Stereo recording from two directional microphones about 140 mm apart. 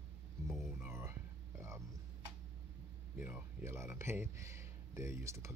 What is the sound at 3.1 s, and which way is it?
Speech, 15° right (ahead or behind).